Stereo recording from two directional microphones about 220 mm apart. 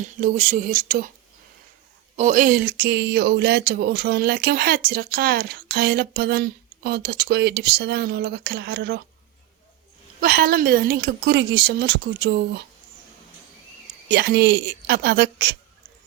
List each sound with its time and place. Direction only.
0.0 s speech: 35° right (ahead or behind)
2.1 s speech: 35° right (ahead or behind)
10.2 s speech: 40° right (ahead or behind)
14.1 s speech: 45° right (ahead or behind)